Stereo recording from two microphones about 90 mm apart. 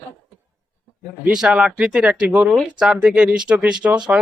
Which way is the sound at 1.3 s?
10° right (ahead or behind).